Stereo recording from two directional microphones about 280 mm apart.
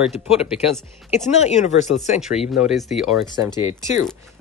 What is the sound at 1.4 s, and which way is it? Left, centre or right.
Speech, left.